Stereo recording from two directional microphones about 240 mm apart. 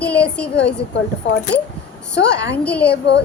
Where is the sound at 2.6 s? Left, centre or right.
Centre.